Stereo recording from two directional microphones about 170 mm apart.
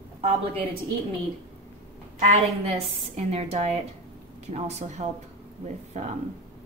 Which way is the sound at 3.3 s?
35° right (ahead or behind).